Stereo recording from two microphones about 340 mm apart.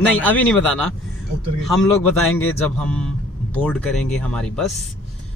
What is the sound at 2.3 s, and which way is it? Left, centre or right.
Speech, centre.